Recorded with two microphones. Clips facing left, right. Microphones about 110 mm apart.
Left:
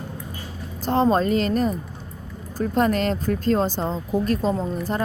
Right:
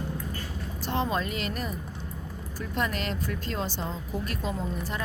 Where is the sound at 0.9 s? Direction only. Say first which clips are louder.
Left 10 dB; 40° left (ahead or behind).